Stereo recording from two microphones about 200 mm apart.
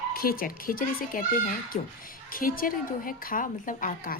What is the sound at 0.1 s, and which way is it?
A woman's voice, 45° left (ahead or behind).